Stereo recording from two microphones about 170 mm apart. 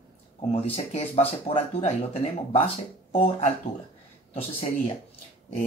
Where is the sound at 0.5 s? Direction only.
35° left (ahead or behind).